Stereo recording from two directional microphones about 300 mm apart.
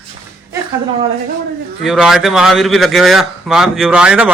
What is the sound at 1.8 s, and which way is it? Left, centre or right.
Speech, centre.